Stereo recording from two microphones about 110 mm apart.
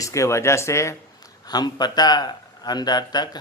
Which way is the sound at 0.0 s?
30° left (ahead or behind).